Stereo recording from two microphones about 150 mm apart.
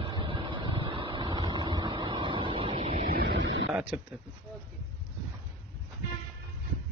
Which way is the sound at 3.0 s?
75° right (ahead or behind).